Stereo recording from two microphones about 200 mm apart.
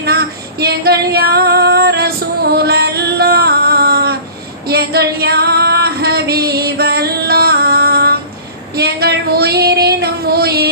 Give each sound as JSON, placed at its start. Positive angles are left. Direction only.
{"t": 0.0, "sound": "female singing", "side_deg": -50}
{"t": 8.7, "sound": "child singing", "side_deg": -50}